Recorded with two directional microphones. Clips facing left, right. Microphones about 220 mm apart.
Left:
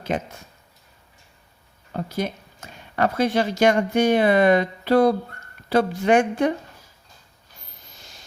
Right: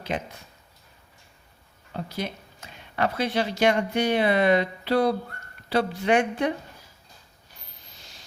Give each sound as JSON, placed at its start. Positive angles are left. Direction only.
{"t": 1.9, "sound": "speech", "side_deg": 45}